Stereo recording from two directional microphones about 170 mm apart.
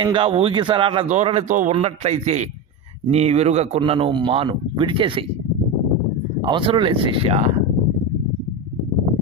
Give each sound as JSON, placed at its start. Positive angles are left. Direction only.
{"t": 0.0, "sound": "speech", "side_deg": -30}
{"t": 1.0, "sound": "speech", "side_deg": -40}
{"t": 6.4, "sound": "speech", "side_deg": -30}